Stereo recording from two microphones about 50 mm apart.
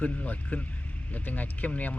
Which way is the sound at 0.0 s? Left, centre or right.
Left.